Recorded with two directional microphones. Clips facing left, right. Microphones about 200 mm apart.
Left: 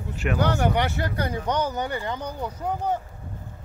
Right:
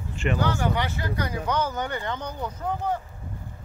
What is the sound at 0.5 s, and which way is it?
Speech, 60° left (ahead or behind).